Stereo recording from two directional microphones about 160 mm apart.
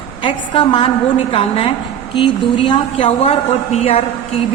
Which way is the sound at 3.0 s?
45° left (ahead or behind).